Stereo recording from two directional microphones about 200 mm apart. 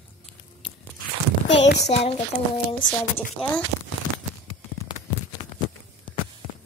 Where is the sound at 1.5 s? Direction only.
60° left (ahead or behind).